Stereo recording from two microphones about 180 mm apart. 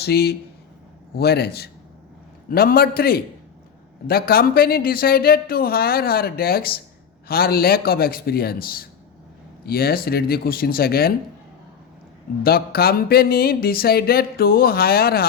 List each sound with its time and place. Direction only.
0.0 s speech: 65° left (ahead or behind)
12.4 s speech: 60° left (ahead or behind)